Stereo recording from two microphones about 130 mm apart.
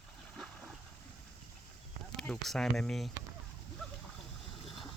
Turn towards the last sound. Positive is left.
turn(degrees=0)  # may be behind; listen again after turning